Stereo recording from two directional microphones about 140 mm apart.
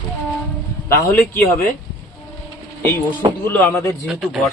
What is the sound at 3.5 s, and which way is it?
Speech, 15° left (ahead or behind).